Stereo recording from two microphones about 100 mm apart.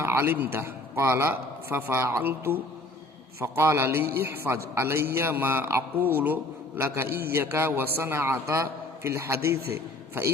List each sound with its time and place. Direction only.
0.0 s a man's voice: 25° right (ahead or behind)